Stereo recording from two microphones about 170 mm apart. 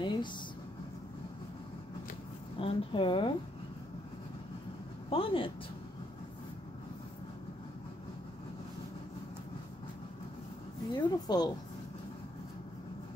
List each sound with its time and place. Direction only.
0.0 s a sound: 25° left (ahead or behind)
2.6 s speech: 30° left (ahead or behind)
5.1 s speech: 30° left (ahead or behind)
10.9 s speech: 25° left (ahead or behind)